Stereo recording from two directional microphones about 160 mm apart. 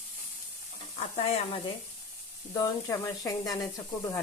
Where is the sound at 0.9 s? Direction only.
40° left (ahead or behind).